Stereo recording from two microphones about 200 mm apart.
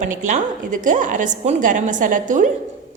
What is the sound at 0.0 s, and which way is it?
A woman's voice, 40° right (ahead or behind).